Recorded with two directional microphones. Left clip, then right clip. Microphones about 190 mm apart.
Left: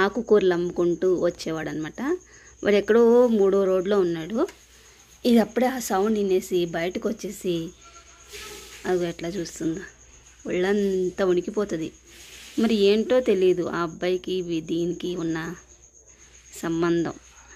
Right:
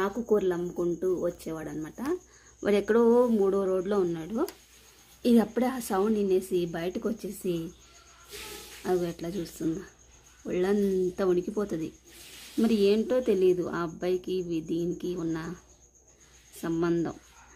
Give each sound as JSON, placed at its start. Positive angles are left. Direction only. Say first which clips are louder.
{"t": 0.0, "sound": "a woman's voice", "louder": "left 7 dB", "side_deg": 20}
{"t": 8.8, "sound": "a woman's voice", "louder": "left 4 dB", "side_deg": 5}
{"t": 16.6, "sound": "a woman's voice", "louder": "left 4 dB", "side_deg": 5}